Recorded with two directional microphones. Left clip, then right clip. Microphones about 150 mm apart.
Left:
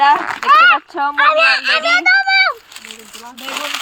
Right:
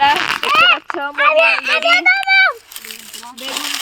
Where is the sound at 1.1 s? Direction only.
5° right (ahead or behind); by 1.9 s 20° right (ahead or behind).